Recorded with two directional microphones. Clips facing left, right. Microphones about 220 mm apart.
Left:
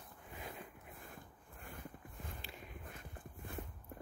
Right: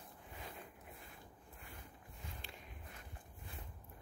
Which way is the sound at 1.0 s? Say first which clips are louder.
Left 3 dB; 50° left (ahead or behind).